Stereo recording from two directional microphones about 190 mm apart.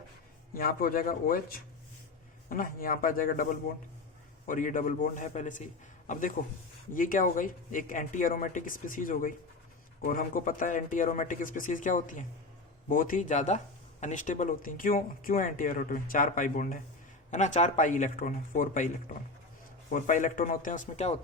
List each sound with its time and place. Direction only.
0.5 s speech: 50° left (ahead or behind)
4.4 s speech: 45° left (ahead or behind)